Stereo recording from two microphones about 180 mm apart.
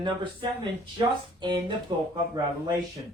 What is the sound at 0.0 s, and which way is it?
Speech, 25° right (ahead or behind).